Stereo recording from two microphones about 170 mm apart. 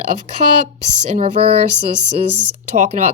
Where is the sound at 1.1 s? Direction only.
40° right (ahead or behind).